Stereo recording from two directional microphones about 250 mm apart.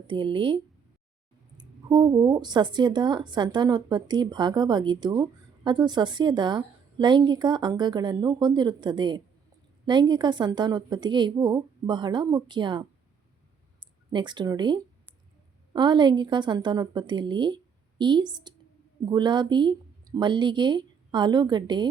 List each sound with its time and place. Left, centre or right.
0.1 s speech: right